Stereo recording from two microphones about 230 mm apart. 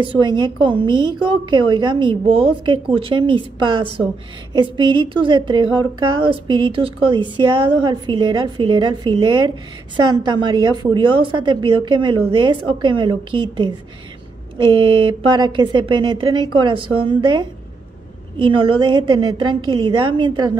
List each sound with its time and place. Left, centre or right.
0.0 s a woman's voice: right